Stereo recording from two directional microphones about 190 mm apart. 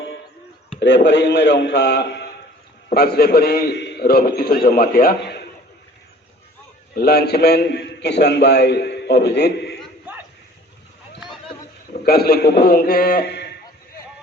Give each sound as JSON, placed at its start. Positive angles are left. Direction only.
{"t": 0.8, "sound": "a man's voice", "side_deg": 65}
{"t": 6.9, "sound": "a man's voice", "side_deg": 55}
{"t": 10.1, "sound": "a sound", "side_deg": -10}
{"t": 12.0, "sound": "a man's voice", "side_deg": 55}